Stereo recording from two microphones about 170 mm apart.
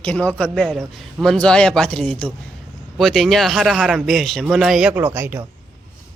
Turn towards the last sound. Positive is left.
turn(degrees=-10)  # may be behind; listen again after turning